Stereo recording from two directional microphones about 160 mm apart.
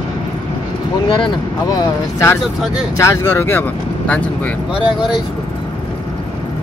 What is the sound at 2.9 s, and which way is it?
Speech, 20° left (ahead or behind).